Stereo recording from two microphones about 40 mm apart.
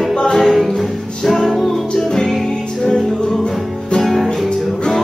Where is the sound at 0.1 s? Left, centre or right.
Centre.